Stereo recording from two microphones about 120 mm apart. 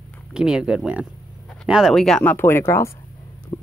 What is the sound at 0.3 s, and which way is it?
Speech, 5° right (ahead or behind).